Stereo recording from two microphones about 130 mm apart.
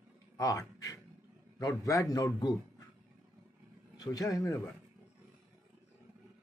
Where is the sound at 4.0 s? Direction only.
30° left (ahead or behind).